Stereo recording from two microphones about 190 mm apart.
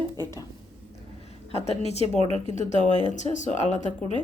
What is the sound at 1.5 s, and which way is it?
Speech, 35° left (ahead or behind).